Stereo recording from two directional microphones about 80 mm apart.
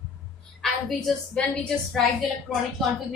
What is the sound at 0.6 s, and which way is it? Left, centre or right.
A woman's voice, centre.